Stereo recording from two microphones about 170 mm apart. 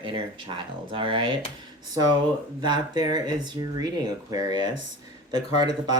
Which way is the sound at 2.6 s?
25° right (ahead or behind).